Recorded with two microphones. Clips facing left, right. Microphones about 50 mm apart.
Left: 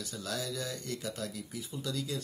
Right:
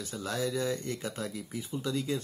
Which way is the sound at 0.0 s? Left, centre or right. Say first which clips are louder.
Right 5 dB; right.